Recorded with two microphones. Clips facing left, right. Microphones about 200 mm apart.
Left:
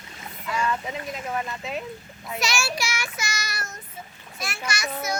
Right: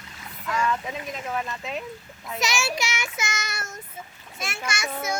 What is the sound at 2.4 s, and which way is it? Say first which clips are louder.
Child singing: right 1 dB; 20° right (ahead or behind).